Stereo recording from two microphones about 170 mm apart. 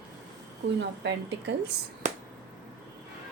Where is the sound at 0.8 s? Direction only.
90° right.